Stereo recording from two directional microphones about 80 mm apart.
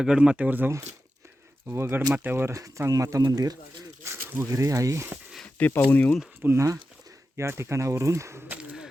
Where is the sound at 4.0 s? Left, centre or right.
Right.